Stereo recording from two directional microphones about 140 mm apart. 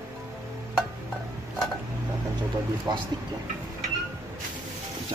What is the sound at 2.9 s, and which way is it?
Speech, 30° right (ahead or behind).